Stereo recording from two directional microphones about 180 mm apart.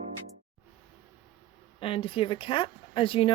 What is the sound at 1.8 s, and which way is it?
A woman's voice, 30° left (ahead or behind).